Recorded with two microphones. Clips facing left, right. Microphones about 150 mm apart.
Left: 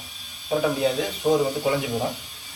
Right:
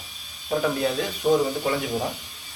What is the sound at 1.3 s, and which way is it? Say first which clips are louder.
Speech: left 1 dB; 10° left (ahead or behind).